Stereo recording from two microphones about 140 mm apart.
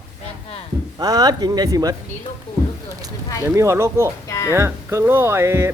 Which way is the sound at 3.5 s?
20° right (ahead or behind).